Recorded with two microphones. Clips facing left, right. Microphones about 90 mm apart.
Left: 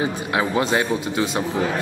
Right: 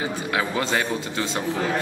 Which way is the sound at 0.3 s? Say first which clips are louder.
Left 3 dB; 20° left (ahead or behind).